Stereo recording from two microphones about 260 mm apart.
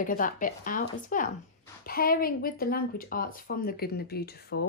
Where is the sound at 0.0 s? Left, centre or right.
Left.